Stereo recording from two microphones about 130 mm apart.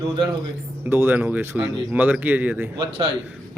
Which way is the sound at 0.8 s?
15° right (ahead or behind).